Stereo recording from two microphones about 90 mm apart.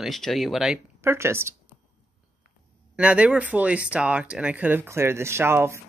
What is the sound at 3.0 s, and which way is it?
Speech, 15° right (ahead or behind).